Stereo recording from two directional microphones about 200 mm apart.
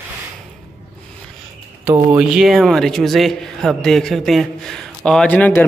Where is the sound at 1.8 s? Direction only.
10° right (ahead or behind).